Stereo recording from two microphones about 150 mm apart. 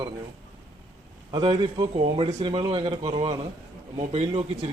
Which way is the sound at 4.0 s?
50° right (ahead or behind).